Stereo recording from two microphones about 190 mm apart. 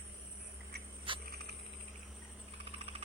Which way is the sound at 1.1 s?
25° right (ahead or behind).